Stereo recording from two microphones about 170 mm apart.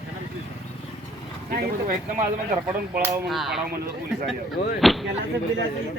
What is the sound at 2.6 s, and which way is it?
Speech, 10° right (ahead or behind).